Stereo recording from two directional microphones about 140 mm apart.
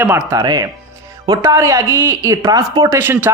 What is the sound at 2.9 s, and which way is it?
Speech, 15° right (ahead or behind).